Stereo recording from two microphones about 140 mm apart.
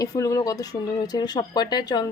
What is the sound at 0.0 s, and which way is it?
Speech, 25° left (ahead or behind).